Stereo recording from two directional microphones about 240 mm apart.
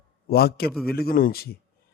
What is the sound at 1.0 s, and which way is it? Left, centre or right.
Speech, left.